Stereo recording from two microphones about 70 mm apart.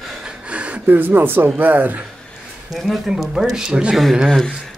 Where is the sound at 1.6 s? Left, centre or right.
Right.